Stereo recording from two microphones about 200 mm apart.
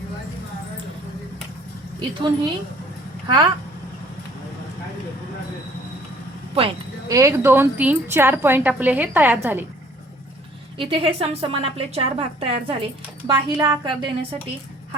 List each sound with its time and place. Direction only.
2.0 s a woman's voice: 20° right (ahead or behind)
6.6 s sheep: 25° right (ahead or behind)
7.2 s speech: 15° right (ahead or behind)
10.8 s a woman's voice: 25° right (ahead or behind)